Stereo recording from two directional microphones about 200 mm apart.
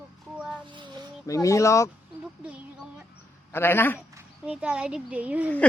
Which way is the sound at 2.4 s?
5° right (ahead or behind).